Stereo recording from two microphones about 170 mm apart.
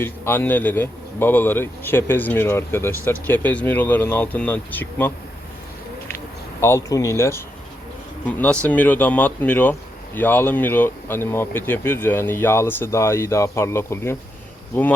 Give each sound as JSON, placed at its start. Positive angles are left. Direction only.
{"t": 0.0, "sound": "speech", "side_deg": 15}
{"t": 6.6, "sound": "speech", "side_deg": 15}